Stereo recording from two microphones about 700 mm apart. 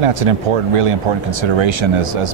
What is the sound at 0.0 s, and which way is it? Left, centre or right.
Speech, right.